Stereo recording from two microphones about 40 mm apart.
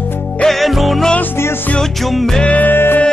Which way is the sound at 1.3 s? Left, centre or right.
Left.